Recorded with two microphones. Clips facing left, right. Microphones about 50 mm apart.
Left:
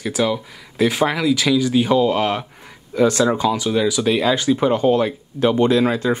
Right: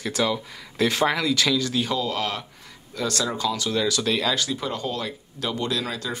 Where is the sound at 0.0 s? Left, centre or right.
Centre.